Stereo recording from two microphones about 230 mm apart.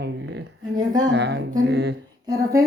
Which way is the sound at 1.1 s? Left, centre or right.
Right.